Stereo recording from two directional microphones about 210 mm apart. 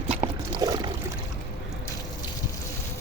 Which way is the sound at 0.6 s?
15° right (ahead or behind).